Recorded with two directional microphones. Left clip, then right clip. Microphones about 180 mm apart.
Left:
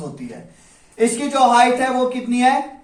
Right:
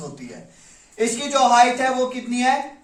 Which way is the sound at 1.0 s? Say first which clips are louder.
Left 3 dB; 15° right (ahead or behind).